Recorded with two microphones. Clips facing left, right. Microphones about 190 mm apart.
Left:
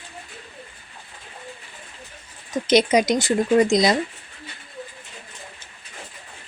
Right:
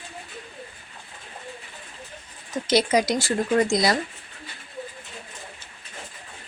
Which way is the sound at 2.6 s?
20° left (ahead or behind).